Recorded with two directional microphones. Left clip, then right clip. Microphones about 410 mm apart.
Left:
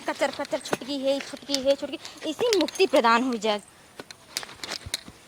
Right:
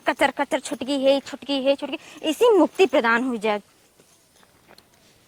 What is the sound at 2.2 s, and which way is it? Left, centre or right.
Speech, right.